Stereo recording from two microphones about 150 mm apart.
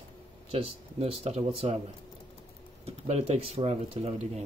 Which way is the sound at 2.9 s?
45° right (ahead or behind).